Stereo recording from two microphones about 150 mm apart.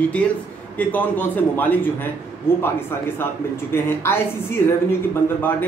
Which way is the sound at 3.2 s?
15° left (ahead or behind).